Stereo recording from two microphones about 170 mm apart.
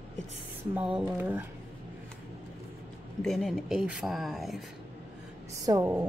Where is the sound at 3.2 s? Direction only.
Centre (ahead or behind).